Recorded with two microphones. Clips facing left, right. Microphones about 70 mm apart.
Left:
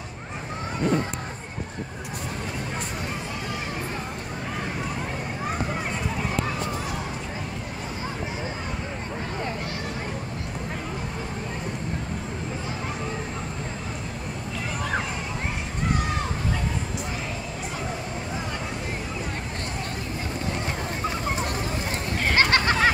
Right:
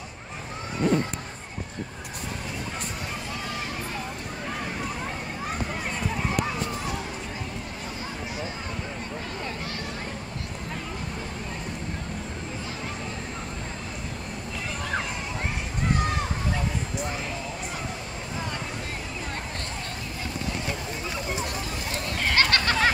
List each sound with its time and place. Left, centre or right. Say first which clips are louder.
22.2 s goat: left 2 dB; left